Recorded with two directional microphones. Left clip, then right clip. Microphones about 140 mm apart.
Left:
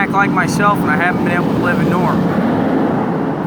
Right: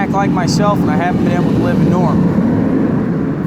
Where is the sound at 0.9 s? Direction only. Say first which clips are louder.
Left 1 dB; 15° left (ahead or behind).